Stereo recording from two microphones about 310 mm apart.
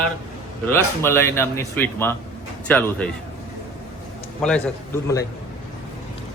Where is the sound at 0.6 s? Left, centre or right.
Centre.